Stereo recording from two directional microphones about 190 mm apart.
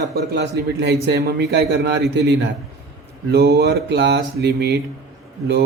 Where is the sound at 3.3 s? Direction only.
55° right (ahead or behind).